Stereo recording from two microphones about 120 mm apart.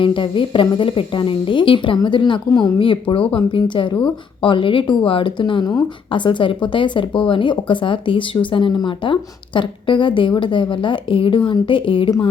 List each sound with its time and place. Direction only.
0.0 s a woman's voice: 45° left (ahead or behind)